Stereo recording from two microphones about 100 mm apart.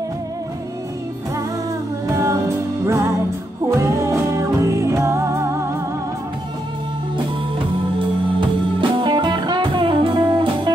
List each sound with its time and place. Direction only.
2.0 s music: 30° right (ahead or behind)
9.0 s music: 50° right (ahead or behind)